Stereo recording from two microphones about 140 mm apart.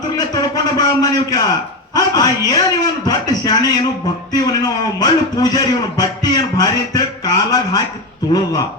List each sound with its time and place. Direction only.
0.5 s a man's voice: 25° left (ahead or behind)